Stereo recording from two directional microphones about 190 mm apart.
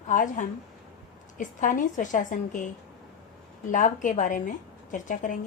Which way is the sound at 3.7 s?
40° left (ahead or behind).